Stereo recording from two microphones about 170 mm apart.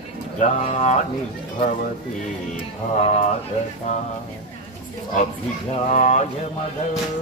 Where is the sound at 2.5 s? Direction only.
45° left (ahead or behind).